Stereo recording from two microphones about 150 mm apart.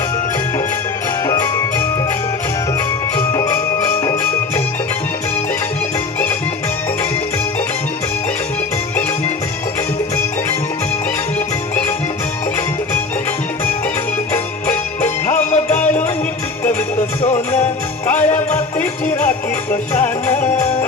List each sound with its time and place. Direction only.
3.2 s music: 15° left (ahead or behind)
14.3 s music: 10° left (ahead or behind)
15.3 s music: 50° left (ahead or behind)
18.2 s music: 50° left (ahead or behind)
20.3 s music: 50° left (ahead or behind)